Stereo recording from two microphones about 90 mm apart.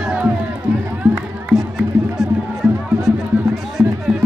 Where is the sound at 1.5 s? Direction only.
Centre (ahead or behind).